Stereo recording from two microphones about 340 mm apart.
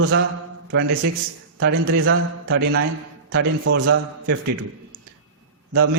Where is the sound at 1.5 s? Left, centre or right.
Right.